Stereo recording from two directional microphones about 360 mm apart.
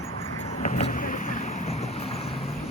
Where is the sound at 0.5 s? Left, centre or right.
Centre.